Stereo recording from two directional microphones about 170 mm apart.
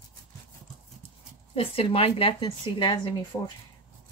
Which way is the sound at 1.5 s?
35° left (ahead or behind).